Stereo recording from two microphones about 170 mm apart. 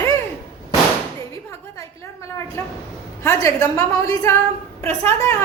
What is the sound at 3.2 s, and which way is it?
A woman's voice, 15° left (ahead or behind).